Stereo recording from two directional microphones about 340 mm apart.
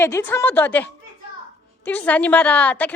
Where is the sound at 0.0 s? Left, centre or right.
Centre.